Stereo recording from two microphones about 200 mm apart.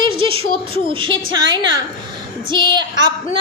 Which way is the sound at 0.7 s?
25° right (ahead or behind).